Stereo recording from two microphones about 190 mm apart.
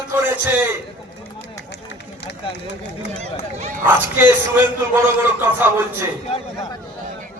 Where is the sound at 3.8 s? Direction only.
10° right (ahead or behind).